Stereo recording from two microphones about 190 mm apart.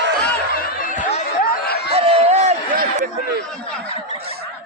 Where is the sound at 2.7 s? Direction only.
50° right (ahead or behind).